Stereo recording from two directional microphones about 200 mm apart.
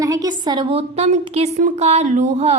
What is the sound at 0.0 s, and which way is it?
A woman's voice, 15° right (ahead or behind).